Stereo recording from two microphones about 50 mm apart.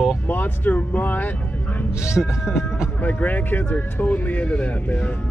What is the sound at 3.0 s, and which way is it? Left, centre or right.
Speech, left.